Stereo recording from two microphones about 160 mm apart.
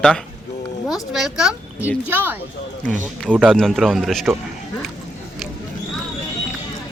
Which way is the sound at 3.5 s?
5° left (ahead or behind).